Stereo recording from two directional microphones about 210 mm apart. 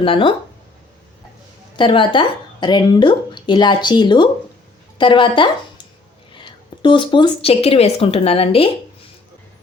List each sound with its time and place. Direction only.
0.0 s speech: 25° left (ahead or behind)
1.7 s a woman's voice: 25° left (ahead or behind)